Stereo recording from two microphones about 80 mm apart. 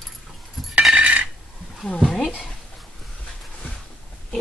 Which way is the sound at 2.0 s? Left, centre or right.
Centre.